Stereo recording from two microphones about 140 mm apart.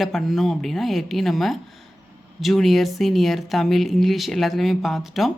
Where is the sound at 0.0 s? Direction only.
Centre (ahead or behind).